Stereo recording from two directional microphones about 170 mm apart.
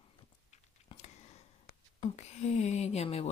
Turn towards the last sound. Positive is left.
turn(degrees=35)  # may be behind; listen again after turning